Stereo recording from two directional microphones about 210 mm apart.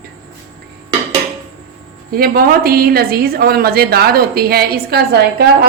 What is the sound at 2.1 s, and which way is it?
A woman's voice, 45° right (ahead or behind).